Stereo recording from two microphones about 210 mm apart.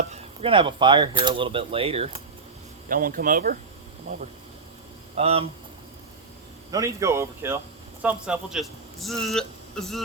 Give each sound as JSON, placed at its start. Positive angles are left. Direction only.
{"t": 0.1, "sound": "speech", "side_deg": -30}
{"t": 2.9, "sound": "speech", "side_deg": -40}
{"t": 5.1, "sound": "speech", "side_deg": -30}
{"t": 6.7, "sound": "a man's voice", "side_deg": -15}